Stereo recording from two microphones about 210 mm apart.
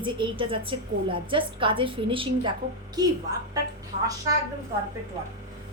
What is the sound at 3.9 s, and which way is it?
Speech, 30° right (ahead or behind).